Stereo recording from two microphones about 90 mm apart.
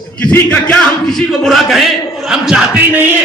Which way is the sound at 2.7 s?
15° right (ahead or behind).